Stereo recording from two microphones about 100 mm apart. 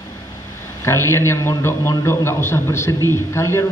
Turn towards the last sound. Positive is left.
turn(degrees=25)  # may be behind; listen again after turning